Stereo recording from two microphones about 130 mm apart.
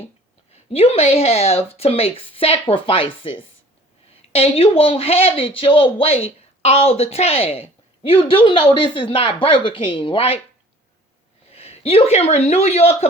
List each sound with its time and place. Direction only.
0.7 s speech: 50° left (ahead or behind)
11.5 s a man's voice: 50° left (ahead or behind)